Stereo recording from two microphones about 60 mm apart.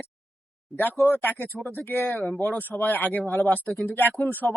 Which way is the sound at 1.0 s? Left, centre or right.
Left.